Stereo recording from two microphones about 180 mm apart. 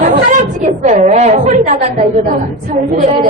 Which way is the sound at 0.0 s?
45° right (ahead or behind).